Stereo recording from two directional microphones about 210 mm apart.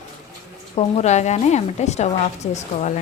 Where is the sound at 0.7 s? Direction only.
30° left (ahead or behind).